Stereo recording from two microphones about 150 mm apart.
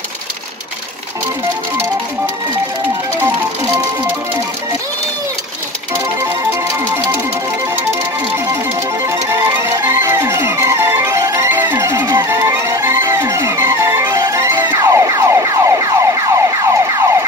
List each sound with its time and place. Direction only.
3.2 s music: 15° right (ahead or behind)
9.0 s music: 20° right (ahead or behind)